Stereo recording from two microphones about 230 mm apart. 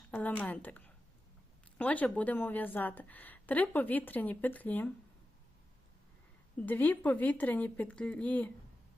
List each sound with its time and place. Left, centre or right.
0.1 s a woman's voice: centre
6.6 s a woman's voice: centre